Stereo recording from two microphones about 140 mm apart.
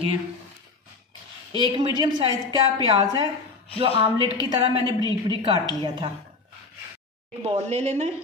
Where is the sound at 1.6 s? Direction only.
30° right (ahead or behind).